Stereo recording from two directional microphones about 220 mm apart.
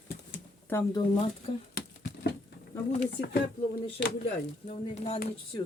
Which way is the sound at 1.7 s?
45° left (ahead or behind).